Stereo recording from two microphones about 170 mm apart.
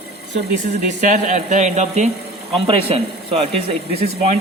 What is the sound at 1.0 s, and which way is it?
Speech, 50° right (ahead or behind).